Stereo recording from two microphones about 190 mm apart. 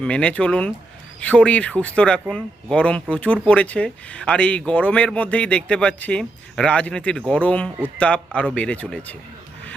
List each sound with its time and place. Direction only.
0.0 s speech: 5° left (ahead or behind)